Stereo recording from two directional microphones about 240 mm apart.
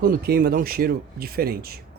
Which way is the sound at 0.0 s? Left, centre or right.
Right.